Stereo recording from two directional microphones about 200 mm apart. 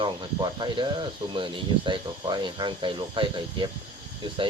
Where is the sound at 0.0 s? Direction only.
20° right (ahead or behind).